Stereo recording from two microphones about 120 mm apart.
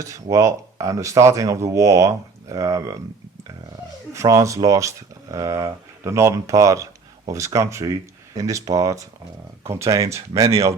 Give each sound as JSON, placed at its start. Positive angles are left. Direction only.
{"t": 0.0, "sound": "speech", "side_deg": -25}
{"t": 4.1, "sound": "speech", "side_deg": -25}